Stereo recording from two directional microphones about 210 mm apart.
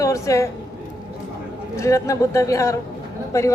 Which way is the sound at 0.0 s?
15° left (ahead or behind).